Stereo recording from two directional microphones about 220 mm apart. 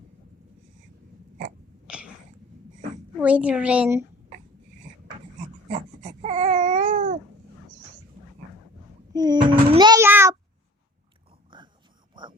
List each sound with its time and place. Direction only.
1.9 s a sound: 5° right (ahead or behind)
3.2 s a woman's voice: 5° right (ahead or behind)
5.6 s babbling: 35° right (ahead or behind)
9.1 s child singing: 20° right (ahead or behind)
11.5 s pig: 20° right (ahead or behind)